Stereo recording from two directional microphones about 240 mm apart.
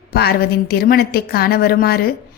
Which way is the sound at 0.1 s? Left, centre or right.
Left.